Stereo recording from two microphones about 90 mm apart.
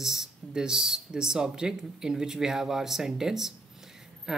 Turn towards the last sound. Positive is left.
turn(degrees=-5)  # may be behind; listen again after turning